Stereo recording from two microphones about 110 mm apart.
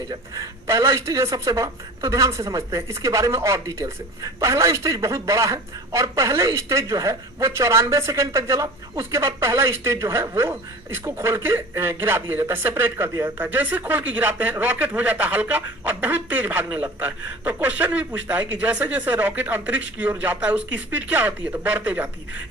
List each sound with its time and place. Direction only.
0.3 s a woman's voice: 25° right (ahead or behind)